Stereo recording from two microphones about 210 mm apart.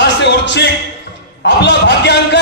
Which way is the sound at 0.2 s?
55° left (ahead or behind).